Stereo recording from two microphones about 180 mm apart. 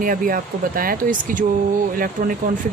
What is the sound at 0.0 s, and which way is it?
Speech, 50° right (ahead or behind).